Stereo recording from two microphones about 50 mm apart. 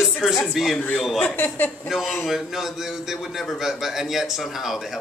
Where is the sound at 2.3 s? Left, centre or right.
Centre.